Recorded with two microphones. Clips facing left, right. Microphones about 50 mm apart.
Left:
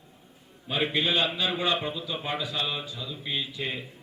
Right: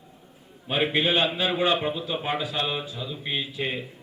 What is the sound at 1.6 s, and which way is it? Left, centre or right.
A man's voice, centre.